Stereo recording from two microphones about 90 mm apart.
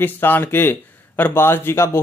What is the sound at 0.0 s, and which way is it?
Speech, 25° left (ahead or behind).